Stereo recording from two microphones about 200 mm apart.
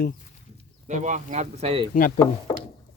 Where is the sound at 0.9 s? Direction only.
35° right (ahead or behind).